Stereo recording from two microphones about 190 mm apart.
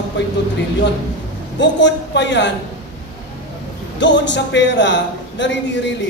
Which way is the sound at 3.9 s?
70° left (ahead or behind).